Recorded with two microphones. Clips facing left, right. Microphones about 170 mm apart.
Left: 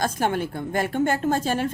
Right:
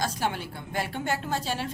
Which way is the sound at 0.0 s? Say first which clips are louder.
Left 6 dB; 50° left (ahead or behind).